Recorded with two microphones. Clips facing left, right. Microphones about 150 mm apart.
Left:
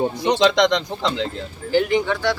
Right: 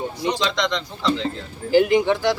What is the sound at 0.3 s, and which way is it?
Speech, 60° left (ahead or behind).